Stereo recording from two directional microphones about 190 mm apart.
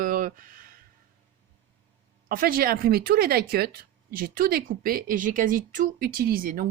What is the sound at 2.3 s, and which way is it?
Speech, 50° right (ahead or behind).